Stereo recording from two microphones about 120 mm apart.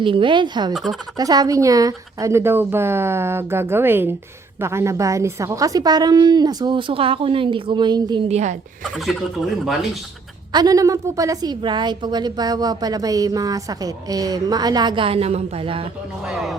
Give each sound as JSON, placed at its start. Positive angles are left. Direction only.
{"t": 0.0, "sound": "a woman's voice", "side_deg": -45}
{"t": 0.7, "sound": "speech", "side_deg": 0}
{"t": 1.1, "sound": "a woman's voice", "side_deg": -35}
{"t": 8.3, "sound": "speech", "side_deg": -75}
{"t": 8.8, "sound": "speech", "side_deg": 0}
{"t": 10.5, "sound": "a woman's voice", "side_deg": -35}
{"t": 16.2, "sound": "speech", "side_deg": -5}